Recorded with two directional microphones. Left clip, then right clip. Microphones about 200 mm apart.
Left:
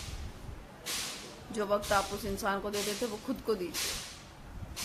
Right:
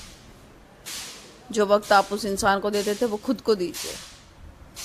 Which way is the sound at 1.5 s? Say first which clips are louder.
Right 11 dB; 45° right (ahead or behind).